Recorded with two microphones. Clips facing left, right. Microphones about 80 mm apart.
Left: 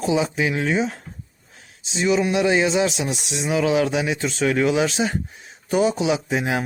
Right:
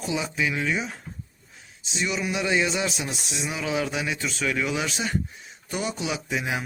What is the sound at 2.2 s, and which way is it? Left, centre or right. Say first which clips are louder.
Speech: left 4 dB; left.